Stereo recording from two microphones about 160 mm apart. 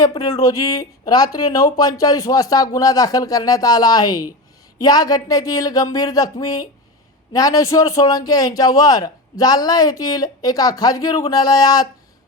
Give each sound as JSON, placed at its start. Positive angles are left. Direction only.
{"t": 0.0, "sound": "a man's voice", "side_deg": 20}